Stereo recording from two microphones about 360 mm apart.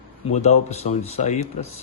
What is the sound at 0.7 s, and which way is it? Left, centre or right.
Speech, centre.